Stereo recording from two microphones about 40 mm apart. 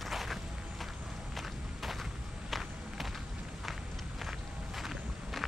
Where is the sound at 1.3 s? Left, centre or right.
Centre.